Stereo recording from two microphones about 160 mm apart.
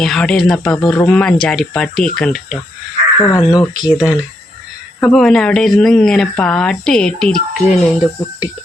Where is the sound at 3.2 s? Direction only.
25° left (ahead or behind).